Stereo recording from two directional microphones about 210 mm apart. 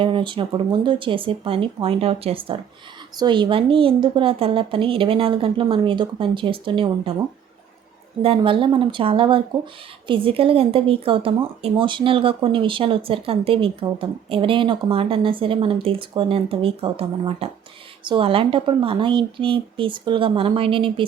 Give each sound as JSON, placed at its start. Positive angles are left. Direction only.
{"t": 0.0, "sound": "a woman's voice", "side_deg": -25}
{"t": 8.2, "sound": "a woman's voice", "side_deg": -25}